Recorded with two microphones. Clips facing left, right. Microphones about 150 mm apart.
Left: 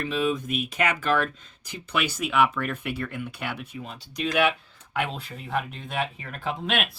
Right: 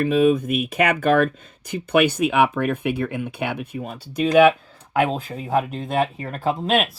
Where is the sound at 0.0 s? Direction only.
50° right (ahead or behind).